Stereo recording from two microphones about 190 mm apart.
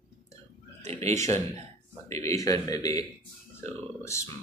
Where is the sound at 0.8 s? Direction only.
35° right (ahead or behind).